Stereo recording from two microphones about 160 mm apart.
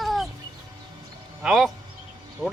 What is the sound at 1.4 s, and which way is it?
A man's voice, centre (ahead or behind).